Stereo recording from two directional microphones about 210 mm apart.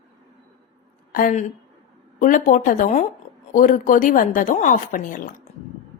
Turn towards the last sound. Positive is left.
turn(degrees=40)  # may be behind; listen again after turning